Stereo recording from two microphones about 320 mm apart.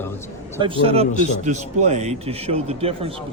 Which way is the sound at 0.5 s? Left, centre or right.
Centre.